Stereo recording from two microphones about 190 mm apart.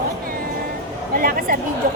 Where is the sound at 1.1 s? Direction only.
50° right (ahead or behind).